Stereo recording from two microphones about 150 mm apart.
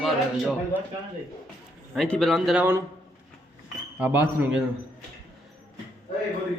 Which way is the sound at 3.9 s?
10° right (ahead or behind).